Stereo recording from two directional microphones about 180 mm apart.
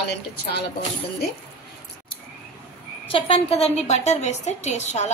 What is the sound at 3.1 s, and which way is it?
A woman's voice, 30° left (ahead or behind).